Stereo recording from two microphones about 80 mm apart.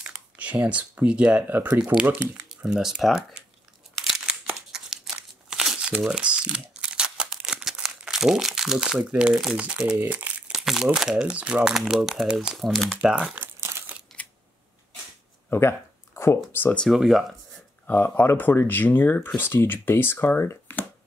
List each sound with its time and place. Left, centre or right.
0.0 s speech: centre
2.5 s speech: centre
4.0 s crumpling: centre
9.1 s speech: centre
10.5 s speech: centre
12.5 s speech: centre
12.9 s speech: centre
13.3 s crumpling: right
14.2 s camera: centre
15.5 s speech: left
16.9 s speech: centre
17.8 s speech: left